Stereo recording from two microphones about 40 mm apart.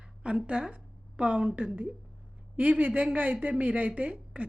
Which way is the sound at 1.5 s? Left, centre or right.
Right.